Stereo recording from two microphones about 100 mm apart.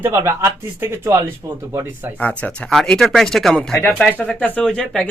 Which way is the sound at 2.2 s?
15° left (ahead or behind).